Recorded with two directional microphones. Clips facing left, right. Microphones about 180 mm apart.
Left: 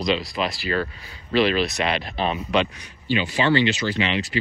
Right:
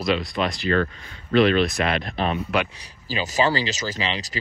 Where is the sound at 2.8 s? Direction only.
40° right (ahead or behind).